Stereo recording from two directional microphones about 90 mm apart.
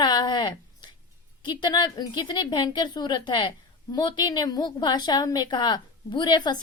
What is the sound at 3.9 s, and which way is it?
A woman's voice, 50° left (ahead or behind).